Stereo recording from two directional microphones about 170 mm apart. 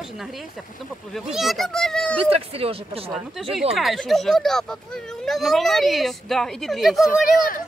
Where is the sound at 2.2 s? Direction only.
35° right (ahead or behind).